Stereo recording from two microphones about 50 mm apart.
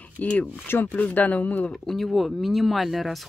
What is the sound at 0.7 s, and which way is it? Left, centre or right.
Speech, left.